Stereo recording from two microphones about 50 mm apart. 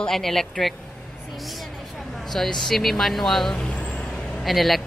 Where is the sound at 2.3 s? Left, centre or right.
Centre.